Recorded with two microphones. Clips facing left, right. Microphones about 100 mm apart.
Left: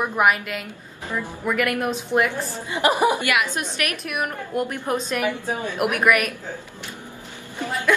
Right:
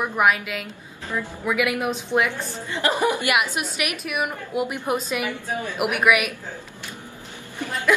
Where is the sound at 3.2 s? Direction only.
20° right (ahead or behind).